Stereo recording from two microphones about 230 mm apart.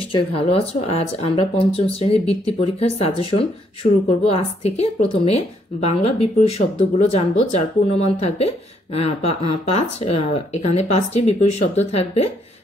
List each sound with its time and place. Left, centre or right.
0.0 s speech: left